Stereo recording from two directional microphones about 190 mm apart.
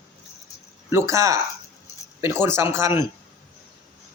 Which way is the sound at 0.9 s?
15° right (ahead or behind).